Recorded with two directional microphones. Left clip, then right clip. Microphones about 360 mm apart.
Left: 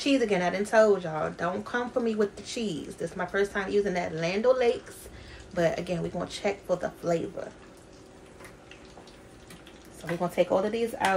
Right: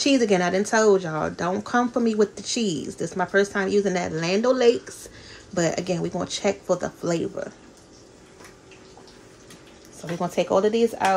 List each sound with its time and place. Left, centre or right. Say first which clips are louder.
0.0 s speech: right 5 dB; right
10.2 s speech: right 4 dB; right